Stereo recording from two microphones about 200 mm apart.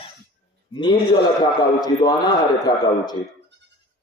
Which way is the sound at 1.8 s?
20° left (ahead or behind).